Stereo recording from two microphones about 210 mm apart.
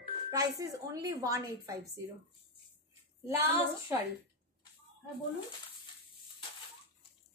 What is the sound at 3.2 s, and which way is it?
Speech, 10° right (ahead or behind).